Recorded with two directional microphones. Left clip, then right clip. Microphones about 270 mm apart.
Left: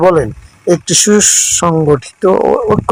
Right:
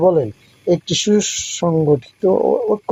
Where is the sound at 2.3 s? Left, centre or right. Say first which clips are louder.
Left 5 dB; left.